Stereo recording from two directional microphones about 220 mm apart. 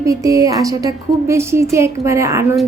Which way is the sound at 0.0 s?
15° right (ahead or behind).